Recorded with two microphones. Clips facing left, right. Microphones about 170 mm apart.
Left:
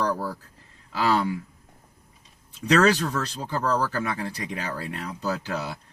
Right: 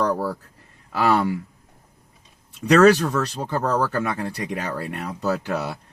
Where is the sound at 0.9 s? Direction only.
65° right (ahead or behind).